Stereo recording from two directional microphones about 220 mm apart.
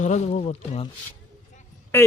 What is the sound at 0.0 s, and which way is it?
Speech, 30° left (ahead or behind).